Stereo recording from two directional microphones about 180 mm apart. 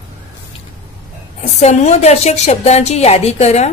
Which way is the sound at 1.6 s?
35° left (ahead or behind).